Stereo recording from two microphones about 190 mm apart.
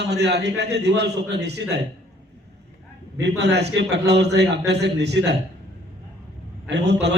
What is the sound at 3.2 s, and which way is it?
A man's voice, 60° right (ahead or behind).